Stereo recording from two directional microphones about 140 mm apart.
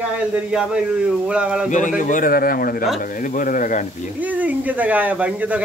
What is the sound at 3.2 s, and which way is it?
Speech, 75° left (ahead or behind).